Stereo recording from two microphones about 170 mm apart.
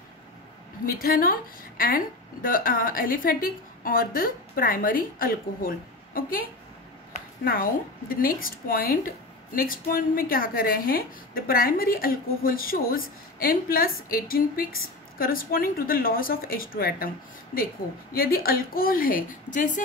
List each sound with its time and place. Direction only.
0.8 s a woman's voice: 60° left (ahead or behind)
7.4 s a woman's voice: 60° left (ahead or behind)
18.1 s a woman's voice: 60° left (ahead or behind)